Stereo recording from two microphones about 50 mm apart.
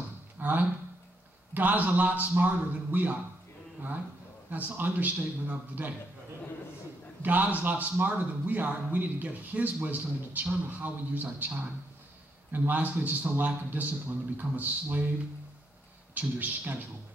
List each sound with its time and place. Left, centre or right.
0.4 s a sound: right
1.5 s a man's voice: right
4.5 s a man's voice: right
7.2 s a man's voice: right
16.2 s a man's voice: right